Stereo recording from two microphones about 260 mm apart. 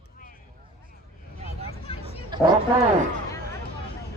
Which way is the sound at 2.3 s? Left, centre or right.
Centre.